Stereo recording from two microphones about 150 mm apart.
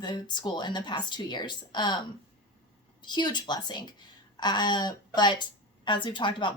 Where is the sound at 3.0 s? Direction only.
30° left (ahead or behind).